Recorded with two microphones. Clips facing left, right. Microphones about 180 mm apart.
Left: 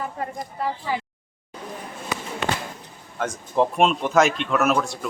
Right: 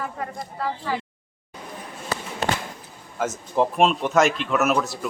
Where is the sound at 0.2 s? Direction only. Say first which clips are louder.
Left 1 dB; 20° left (ahead or behind).